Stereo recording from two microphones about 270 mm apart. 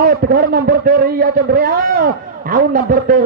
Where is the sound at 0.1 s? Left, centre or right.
Right.